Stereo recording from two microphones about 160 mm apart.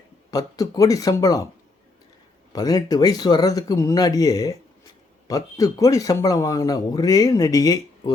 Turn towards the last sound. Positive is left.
turn(degrees=20)  # may be behind; listen again after turning